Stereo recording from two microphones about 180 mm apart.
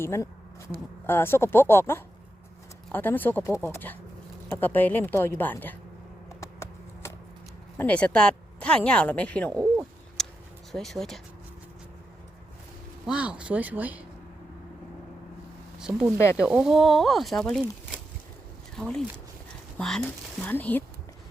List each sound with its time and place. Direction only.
0.0 s speech: 15° left (ahead or behind)
6.2 s computer keyboard: 15° left (ahead or behind)
7.8 s speech: 10° left (ahead or behind)
9.6 s a sound: 5° right (ahead or behind)
10.7 s speech: centre (ahead or behind)
13.1 s speech: 5° right (ahead or behind)
16.1 s speech: 15° left (ahead or behind)
16.4 s speech: 5° right (ahead or behind)